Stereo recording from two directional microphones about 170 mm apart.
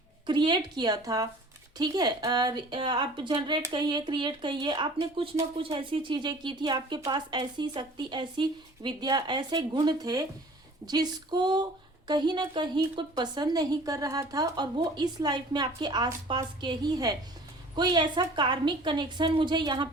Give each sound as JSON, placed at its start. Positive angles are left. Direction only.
{"t": 0.3, "sound": "a woman's voice", "side_deg": -25}